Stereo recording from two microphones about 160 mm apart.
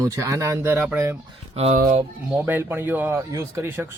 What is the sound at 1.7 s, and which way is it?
Speech, 60° right (ahead or behind).